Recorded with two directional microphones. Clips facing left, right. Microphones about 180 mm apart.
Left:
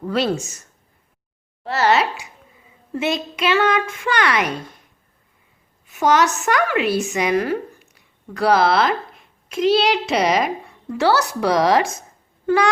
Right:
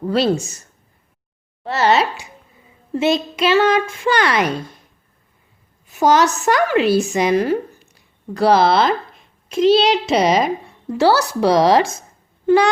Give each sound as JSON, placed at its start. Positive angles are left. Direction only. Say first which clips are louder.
{"t": 0.1, "sound": "a woman's voice", "louder": "right 3 dB", "side_deg": -35}
{"t": 1.6, "sound": "a child's voice", "louder": "right 2 dB", "side_deg": -20}
{"t": 5.9, "sound": "a woman's voice", "louder": "right 2 dB", "side_deg": -35}